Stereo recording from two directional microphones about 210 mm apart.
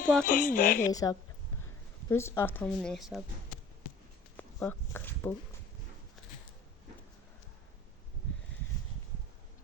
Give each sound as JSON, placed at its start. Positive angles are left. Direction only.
{"t": 0.0, "sound": "speech", "side_deg": 5}
{"t": 0.3, "sound": "speech", "side_deg": 40}
{"t": 2.0, "sound": "speech", "side_deg": 10}
{"t": 4.4, "sound": "a sound", "side_deg": 10}